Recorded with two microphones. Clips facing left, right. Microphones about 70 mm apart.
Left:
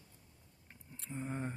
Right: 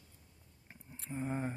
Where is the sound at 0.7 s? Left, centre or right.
Centre.